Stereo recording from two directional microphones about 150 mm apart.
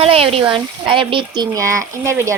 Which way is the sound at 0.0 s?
40° right (ahead or behind).